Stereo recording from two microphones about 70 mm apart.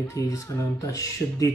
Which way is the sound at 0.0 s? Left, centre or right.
Left.